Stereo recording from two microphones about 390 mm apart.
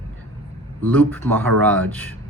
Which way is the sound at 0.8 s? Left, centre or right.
Centre.